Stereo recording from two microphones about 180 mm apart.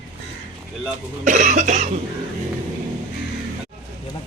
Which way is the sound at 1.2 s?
45° right (ahead or behind).